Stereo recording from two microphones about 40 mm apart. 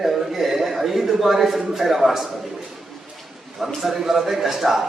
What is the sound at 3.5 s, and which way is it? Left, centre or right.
A man's voice, centre.